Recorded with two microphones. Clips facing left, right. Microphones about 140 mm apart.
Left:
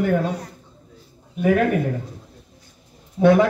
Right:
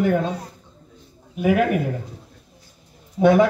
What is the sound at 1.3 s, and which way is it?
Speech, 5° right (ahead or behind).